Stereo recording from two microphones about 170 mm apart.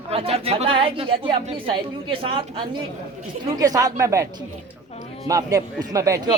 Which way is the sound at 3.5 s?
20° right (ahead or behind).